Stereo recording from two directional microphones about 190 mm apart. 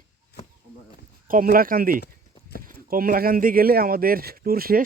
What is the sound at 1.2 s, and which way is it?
Speech, 50° right (ahead or behind).